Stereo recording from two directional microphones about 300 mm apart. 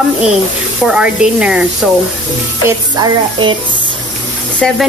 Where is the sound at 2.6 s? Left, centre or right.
Centre.